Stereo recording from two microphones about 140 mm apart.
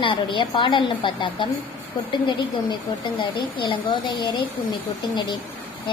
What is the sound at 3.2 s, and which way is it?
A woman's voice, 35° left (ahead or behind).